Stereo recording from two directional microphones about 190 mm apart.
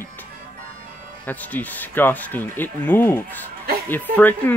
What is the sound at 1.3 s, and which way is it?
Speech, 10° left (ahead or behind).